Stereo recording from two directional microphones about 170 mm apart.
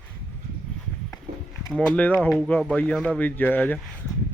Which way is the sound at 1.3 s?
65° right (ahead or behind).